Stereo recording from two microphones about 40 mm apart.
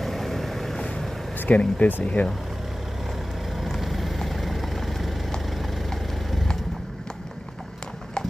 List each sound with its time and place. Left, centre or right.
0.0 s vehicle: centre
1.5 s speech: left
2.2 s speech: left
3.5 s vehicle: centre